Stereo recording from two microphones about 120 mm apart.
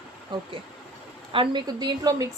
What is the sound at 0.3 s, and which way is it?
A woman's voice, 40° right (ahead or behind).